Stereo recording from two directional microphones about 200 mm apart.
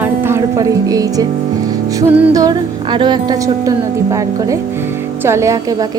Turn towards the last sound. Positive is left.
turn(degrees=-15)  # may be behind; listen again after turning